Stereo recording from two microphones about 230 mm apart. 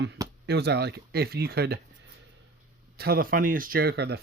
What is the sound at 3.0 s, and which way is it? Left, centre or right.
Speech, right.